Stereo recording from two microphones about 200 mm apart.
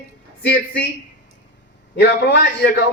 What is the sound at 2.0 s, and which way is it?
Speech, 60° left (ahead or behind).